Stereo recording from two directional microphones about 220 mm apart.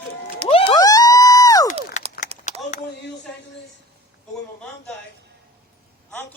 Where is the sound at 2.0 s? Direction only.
35° left (ahead or behind).